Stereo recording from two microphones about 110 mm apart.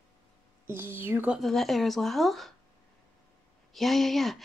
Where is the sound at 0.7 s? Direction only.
20° right (ahead or behind).